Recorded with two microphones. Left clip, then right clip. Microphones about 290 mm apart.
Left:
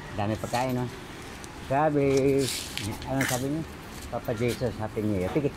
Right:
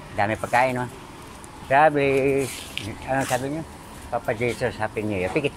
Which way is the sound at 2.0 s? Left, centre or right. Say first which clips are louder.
Right 3 dB; right.